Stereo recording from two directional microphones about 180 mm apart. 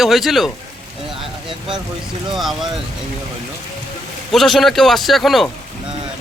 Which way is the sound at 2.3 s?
Centre (ahead or behind).